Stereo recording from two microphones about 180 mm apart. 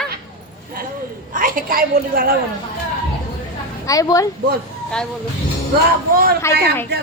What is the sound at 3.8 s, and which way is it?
Speech, 20° left (ahead or behind).